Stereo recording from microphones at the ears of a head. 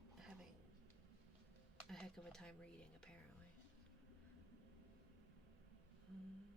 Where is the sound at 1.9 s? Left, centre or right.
Centre.